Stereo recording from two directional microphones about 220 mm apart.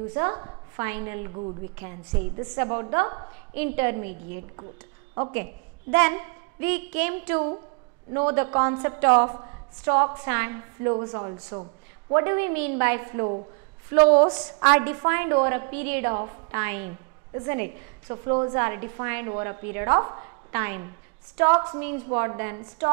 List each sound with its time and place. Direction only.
0.1 s a woman's voice: 20° right (ahead or behind)
5.3 s a woman's voice: 15° right (ahead or behind)